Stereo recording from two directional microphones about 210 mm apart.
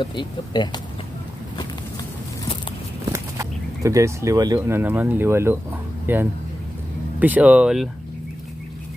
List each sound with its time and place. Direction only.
0.0 s speech: 20° left (ahead or behind)
3.1 s speech: 15° right (ahead or behind)